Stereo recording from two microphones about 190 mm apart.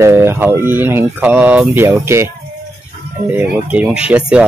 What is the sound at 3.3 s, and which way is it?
Speech, 5° right (ahead or behind).